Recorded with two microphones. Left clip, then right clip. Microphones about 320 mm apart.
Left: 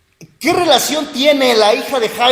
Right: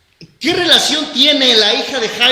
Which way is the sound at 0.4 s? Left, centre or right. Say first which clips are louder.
Even; centre.